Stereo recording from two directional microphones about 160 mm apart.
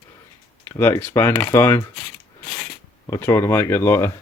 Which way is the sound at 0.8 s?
10° left (ahead or behind).